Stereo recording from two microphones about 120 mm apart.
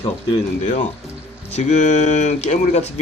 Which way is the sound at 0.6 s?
90° left.